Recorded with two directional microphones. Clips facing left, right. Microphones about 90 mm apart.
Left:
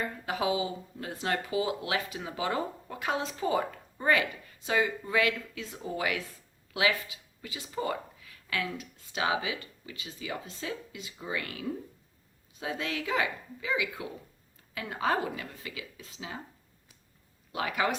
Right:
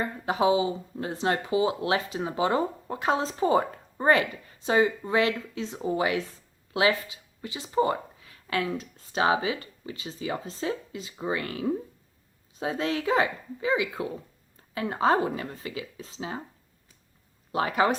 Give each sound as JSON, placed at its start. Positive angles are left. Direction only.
{"t": 0.0, "sound": "speech", "side_deg": -30}
{"t": 17.5, "sound": "speech", "side_deg": -35}